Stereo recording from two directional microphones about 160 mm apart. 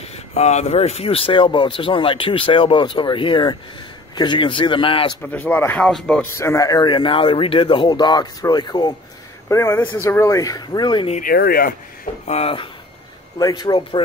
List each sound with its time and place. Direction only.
0.3 s speech: 45° left (ahead or behind)
5.2 s speech: 10° left (ahead or behind)
6.2 s speech: 15° left (ahead or behind)
11.2 s speech: 70° left (ahead or behind)
12.3 s speech: 40° left (ahead or behind)
13.4 s speech: 25° left (ahead or behind)